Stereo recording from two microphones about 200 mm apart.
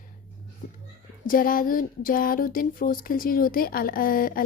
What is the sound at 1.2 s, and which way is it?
Speech, 45° left (ahead or behind).